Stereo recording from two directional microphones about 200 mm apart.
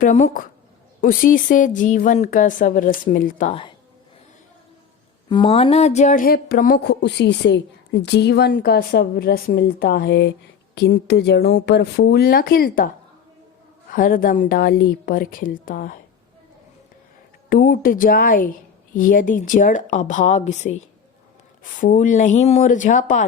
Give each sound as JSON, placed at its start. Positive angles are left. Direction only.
{"t": 0.0, "sound": "a woman's voice", "side_deg": 40}
{"t": 5.3, "sound": "speech", "side_deg": 25}
{"t": 13.9, "sound": "speech", "side_deg": 45}
{"t": 17.5, "sound": "a woman's voice", "side_deg": 45}